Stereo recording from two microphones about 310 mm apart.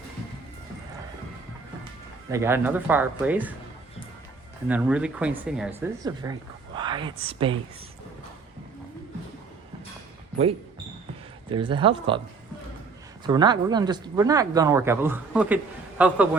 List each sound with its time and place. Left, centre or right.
2.3 s speech: centre
4.7 s speech: centre
11.4 s speech: centre
13.2 s speech: centre